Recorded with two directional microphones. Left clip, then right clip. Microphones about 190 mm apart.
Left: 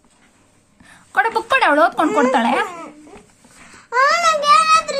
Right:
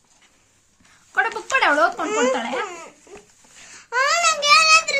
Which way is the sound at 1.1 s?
30° left (ahead or behind).